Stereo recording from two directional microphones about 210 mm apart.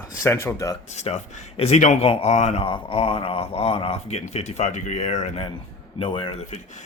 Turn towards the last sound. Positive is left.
turn(degrees=35)  # may be behind; listen again after turning